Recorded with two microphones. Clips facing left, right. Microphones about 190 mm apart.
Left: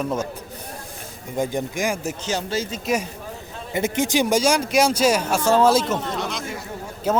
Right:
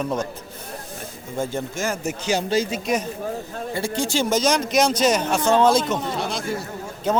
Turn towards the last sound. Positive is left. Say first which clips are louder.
# even
turn(degrees=5)  # may be behind; listen again after turning